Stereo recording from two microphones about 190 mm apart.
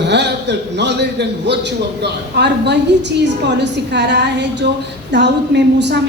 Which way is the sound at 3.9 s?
65° right (ahead or behind).